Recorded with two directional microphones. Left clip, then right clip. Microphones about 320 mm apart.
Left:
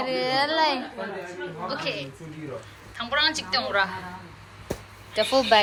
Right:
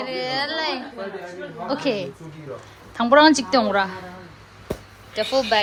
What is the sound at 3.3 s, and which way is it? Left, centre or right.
Speech, centre.